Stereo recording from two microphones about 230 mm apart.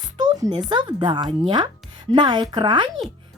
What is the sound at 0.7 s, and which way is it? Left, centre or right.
Speech, centre.